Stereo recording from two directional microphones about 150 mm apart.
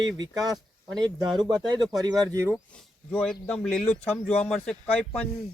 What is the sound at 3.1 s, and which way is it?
Speech, 10° left (ahead or behind).